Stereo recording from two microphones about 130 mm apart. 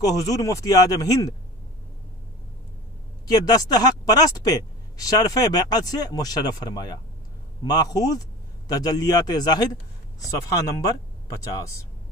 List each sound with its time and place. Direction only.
0.1 s speech: 25° left (ahead or behind)
3.3 s speech: 30° left (ahead or behind)